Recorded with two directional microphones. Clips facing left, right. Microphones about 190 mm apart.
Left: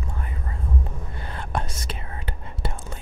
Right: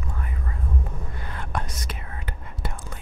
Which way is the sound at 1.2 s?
30° left (ahead or behind).